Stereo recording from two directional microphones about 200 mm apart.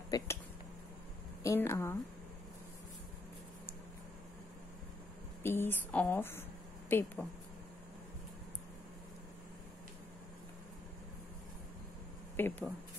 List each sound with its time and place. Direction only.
0.1 s speech: 20° left (ahead or behind)
1.4 s speech: 15° left (ahead or behind)
5.4 s speech: 10° left (ahead or behind)
12.4 s speech: 10° left (ahead or behind)